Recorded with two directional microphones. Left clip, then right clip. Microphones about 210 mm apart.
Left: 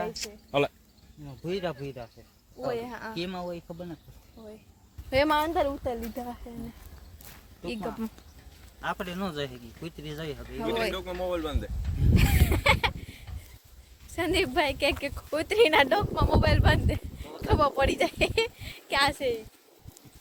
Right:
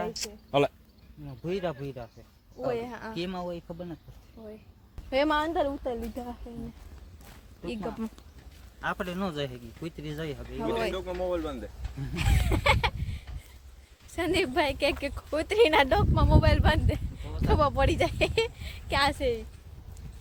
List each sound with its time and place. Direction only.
0.1 s speech: 50° right (ahead or behind)
1.3 s speech: 10° right (ahead or behind)
3.2 s speech: 10° right (ahead or behind)
4.4 s a man's voice: 20° left (ahead or behind)
5.1 s speech: centre (ahead or behind)
7.6 s speech: centre (ahead or behind)
8.8 s speech: 15° right (ahead or behind)
10.9 s a man's voice: 25° left (ahead or behind)
12.1 s a sound: centre (ahead or behind)
14.1 s speech: centre (ahead or behind)